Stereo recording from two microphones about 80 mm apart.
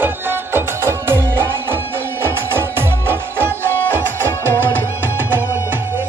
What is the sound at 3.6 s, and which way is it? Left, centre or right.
Music, left.